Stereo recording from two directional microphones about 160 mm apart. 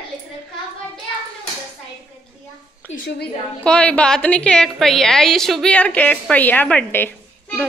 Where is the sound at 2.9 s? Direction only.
65° left (ahead or behind).